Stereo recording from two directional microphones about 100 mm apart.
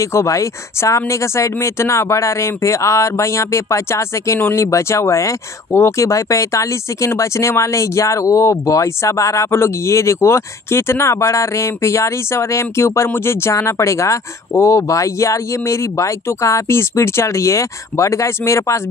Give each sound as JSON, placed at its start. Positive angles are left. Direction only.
{"t": 0.0, "sound": "speech", "side_deg": 30}